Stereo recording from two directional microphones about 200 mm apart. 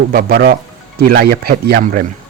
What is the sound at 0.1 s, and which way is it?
Speech, 50° right (ahead or behind).